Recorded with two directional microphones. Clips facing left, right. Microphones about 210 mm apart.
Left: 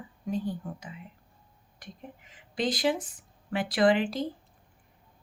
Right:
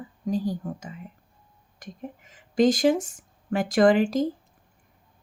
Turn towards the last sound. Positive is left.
turn(degrees=-45)  # may be behind; listen again after turning